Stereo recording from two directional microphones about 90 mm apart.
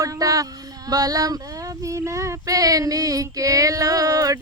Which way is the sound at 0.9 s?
45° right (ahead or behind).